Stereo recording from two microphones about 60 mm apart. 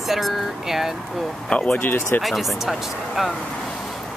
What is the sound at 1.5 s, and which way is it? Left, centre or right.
Speech, centre.